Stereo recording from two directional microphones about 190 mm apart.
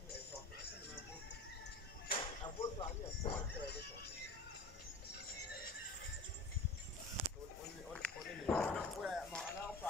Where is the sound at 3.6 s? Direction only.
60° left (ahead or behind).